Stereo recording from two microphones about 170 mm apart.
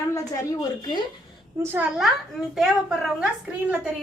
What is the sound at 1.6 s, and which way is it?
Speech, 15° right (ahead or behind).